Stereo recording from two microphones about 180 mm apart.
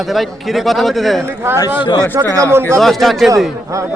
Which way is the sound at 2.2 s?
15° right (ahead or behind).